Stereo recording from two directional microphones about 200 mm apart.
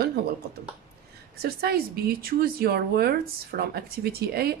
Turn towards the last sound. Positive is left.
turn(degrees=-50)  # may be behind; listen again after turning